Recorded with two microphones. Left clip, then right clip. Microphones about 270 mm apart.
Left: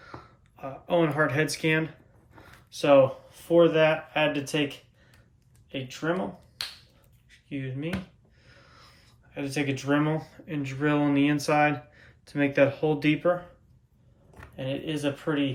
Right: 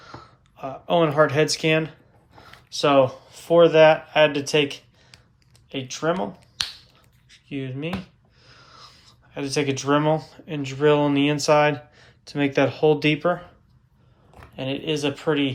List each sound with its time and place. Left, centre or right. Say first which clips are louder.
0.0 s speech: right 3 dB; centre
7.3 s a sound: right 4 dB; centre
8.4 s speech: right 7 dB; centre
14.5 s speech: right 6 dB; centre